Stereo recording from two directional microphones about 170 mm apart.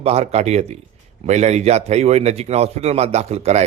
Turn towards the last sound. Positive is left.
turn(degrees=-40)  # may be behind; listen again after turning